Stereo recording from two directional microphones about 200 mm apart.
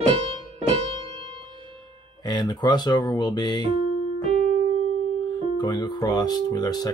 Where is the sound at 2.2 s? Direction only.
20° left (ahead or behind).